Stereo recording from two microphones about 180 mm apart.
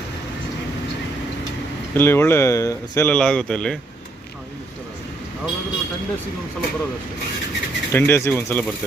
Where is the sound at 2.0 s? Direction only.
10° left (ahead or behind).